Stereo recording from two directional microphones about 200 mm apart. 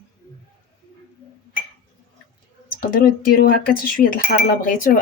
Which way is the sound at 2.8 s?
45° left (ahead or behind).